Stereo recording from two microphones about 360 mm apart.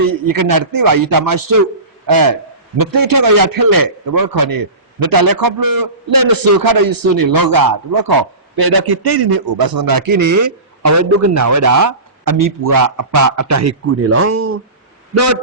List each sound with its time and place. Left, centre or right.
0.1 s a man's voice: right